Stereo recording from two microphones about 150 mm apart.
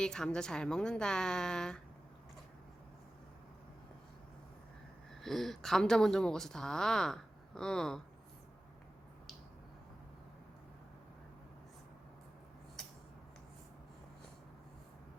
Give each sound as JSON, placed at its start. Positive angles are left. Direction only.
{"t": 0.0, "sound": "a woman's voice", "side_deg": 5}
{"t": 5.2, "sound": "a woman's voice", "side_deg": 0}